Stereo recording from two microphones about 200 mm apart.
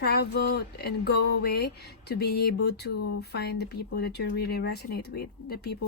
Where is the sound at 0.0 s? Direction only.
55° left (ahead or behind).